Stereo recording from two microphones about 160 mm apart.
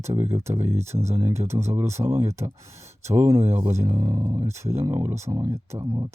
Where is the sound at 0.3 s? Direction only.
15° right (ahead or behind).